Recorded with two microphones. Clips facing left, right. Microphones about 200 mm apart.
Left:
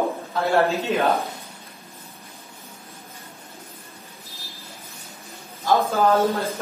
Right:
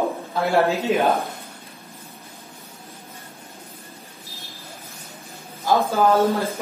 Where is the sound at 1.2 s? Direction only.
55° right (ahead or behind).